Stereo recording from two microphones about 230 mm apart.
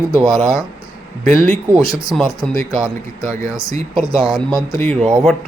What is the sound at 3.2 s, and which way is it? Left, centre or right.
Speech, centre.